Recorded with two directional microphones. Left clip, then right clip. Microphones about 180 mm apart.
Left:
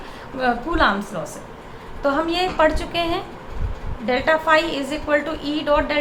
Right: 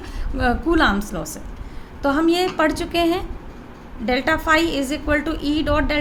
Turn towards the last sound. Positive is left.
turn(degrees=-50)  # may be behind; listen again after turning